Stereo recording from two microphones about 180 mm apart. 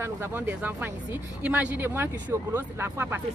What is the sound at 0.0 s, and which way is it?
Speech, 10° right (ahead or behind).